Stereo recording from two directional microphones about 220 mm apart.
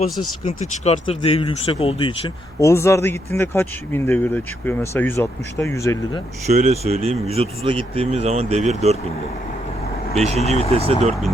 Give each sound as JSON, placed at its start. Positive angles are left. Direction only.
{"t": 0.4, "sound": "speech", "side_deg": 30}
{"t": 2.6, "sound": "speech", "side_deg": 10}
{"t": 6.5, "sound": "speech", "side_deg": -30}
{"t": 10.2, "sound": "speech", "side_deg": -30}
{"t": 10.5, "sound": "speech", "side_deg": 30}